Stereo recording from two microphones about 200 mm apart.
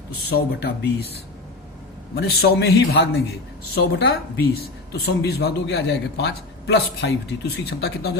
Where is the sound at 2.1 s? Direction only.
55° left (ahead or behind).